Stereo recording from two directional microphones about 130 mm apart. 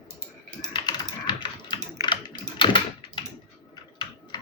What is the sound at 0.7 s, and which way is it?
Typing, 35° left (ahead or behind).